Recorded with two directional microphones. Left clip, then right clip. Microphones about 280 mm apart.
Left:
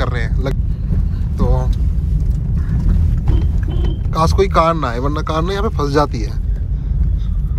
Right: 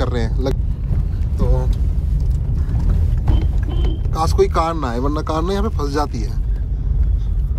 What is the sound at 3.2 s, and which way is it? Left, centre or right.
Speech, centre.